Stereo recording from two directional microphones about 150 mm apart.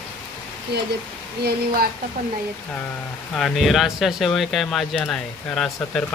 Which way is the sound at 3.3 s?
Centre (ahead or behind).